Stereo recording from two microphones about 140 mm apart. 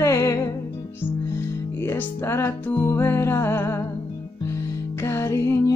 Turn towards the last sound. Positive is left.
turn(degrees=20)  # may be behind; listen again after turning